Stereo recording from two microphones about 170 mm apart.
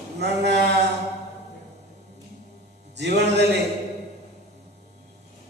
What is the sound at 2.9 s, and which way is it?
Speech, 80° right.